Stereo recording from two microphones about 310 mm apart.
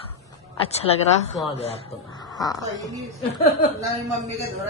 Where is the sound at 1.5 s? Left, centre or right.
Centre.